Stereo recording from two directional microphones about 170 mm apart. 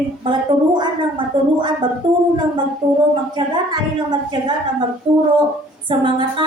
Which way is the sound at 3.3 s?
25° right (ahead or behind).